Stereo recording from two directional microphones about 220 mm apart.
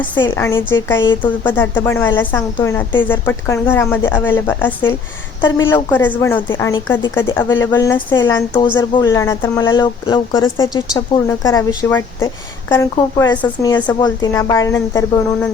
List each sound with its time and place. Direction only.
0.0 s a woman's voice: 10° left (ahead or behind)